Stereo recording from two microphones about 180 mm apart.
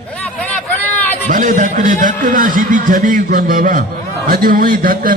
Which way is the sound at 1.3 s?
45° right (ahead or behind).